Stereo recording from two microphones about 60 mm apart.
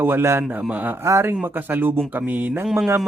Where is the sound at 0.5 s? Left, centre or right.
Right.